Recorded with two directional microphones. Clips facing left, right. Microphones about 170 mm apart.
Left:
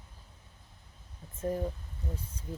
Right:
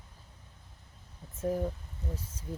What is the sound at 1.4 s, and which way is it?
Speech, 5° right (ahead or behind).